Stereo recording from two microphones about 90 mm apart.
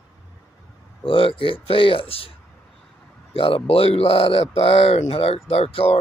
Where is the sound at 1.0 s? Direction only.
75° left (ahead or behind).